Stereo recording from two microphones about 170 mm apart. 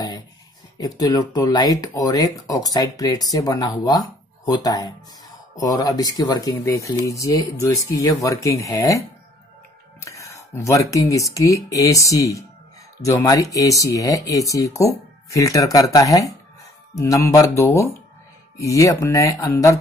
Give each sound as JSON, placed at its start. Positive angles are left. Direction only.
{"t": 0.7, "sound": "speech", "side_deg": 25}